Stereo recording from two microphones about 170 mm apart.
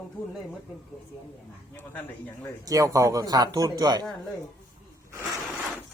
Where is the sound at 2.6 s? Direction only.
20° right (ahead or behind).